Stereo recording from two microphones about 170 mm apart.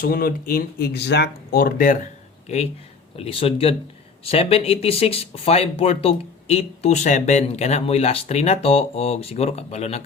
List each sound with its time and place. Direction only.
0.0 s speech: 60° left (ahead or behind)
3.2 s speech: 35° left (ahead or behind)